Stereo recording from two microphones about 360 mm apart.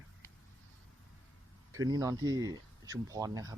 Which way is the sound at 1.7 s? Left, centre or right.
Centre.